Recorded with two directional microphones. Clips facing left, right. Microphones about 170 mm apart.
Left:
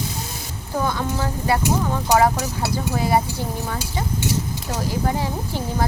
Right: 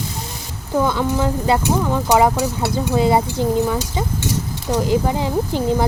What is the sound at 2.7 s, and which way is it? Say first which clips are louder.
Speech: right 6 dB; 25° right (ahead or behind).